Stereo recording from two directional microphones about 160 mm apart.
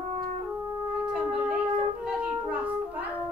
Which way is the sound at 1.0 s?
5° right (ahead or behind).